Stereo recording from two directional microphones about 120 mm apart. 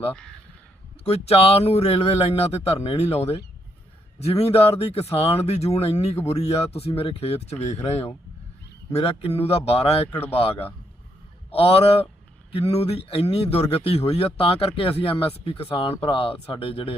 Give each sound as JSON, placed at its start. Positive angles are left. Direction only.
{"t": 1.0, "sound": "speech", "side_deg": 60}